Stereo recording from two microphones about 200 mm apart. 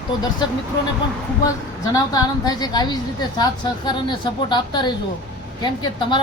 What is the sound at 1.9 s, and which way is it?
A woman's voice, 20° left (ahead or behind).